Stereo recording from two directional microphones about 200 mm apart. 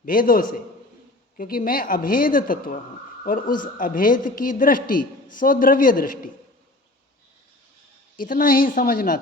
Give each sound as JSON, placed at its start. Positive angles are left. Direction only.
{"t": 0.0, "sound": "a woman's voice", "side_deg": 45}
{"t": 8.1, "sound": "a woman's voice", "side_deg": 45}